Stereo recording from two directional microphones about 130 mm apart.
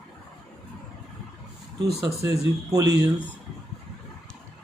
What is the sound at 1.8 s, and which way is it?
Speech, 25° right (ahead or behind).